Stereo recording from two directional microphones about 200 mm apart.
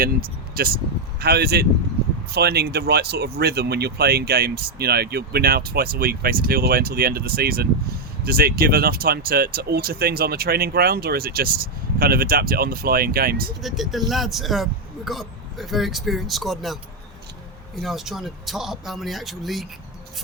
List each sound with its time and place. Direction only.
0.0 s speech: 45° right (ahead or behind)
13.6 s speech: centre (ahead or behind)
17.7 s speech: centre (ahead or behind)